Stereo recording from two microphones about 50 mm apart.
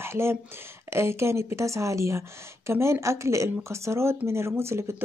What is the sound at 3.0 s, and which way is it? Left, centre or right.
A woman's voice, right.